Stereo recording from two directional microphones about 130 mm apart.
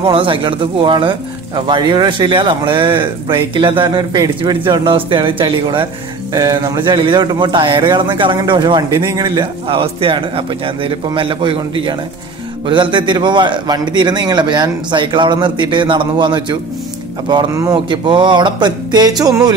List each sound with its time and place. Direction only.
0.0 s speech: 40° right (ahead or behind)
6.3 s speech: 30° right (ahead or behind)
17.5 s a man's voice: 25° right (ahead or behind)
17.7 s speech: 35° right (ahead or behind)